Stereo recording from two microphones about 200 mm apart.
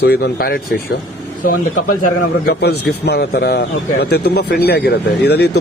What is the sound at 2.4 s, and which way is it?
A man's voice, 55° left (ahead or behind).